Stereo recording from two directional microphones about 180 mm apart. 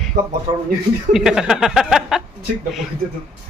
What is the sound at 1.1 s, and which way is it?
Speech, 5° right (ahead or behind).